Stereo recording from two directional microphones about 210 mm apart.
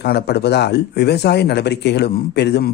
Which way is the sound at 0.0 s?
50° left (ahead or behind).